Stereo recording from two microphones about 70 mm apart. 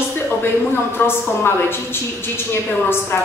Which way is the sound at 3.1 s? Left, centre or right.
Left.